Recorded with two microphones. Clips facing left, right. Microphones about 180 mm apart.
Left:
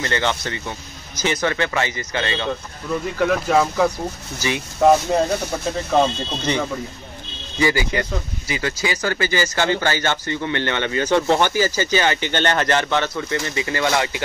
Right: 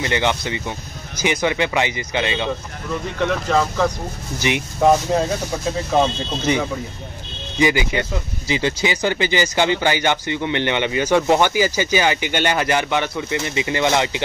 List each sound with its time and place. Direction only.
0.0 s speech: 15° right (ahead or behind)
3.2 s speech: 5° left (ahead or behind)
4.4 s speech: 20° right (ahead or behind)
5.1 s speech: centre (ahead or behind)
7.5 s speech: 20° right (ahead or behind)